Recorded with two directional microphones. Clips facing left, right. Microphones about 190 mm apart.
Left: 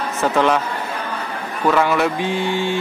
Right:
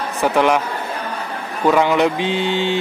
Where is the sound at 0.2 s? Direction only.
15° right (ahead or behind).